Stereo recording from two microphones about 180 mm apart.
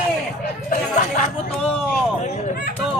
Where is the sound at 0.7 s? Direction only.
45° left (ahead or behind).